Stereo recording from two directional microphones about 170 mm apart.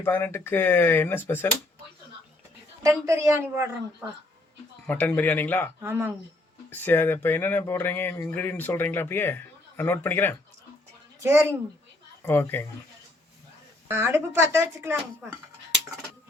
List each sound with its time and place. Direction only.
0.0 s speech: 15° left (ahead or behind)
3.1 s speech: 15° right (ahead or behind)
4.9 s speech: 10° left (ahead or behind)
5.8 s speech: 10° right (ahead or behind)
6.7 s speech: 10° left (ahead or behind)
11.2 s speech: 15° right (ahead or behind)
12.2 s speech: 10° left (ahead or behind)
13.8 s speech: 15° right (ahead or behind)